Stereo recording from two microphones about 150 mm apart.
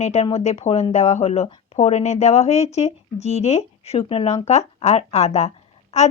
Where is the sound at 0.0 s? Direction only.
45° left (ahead or behind).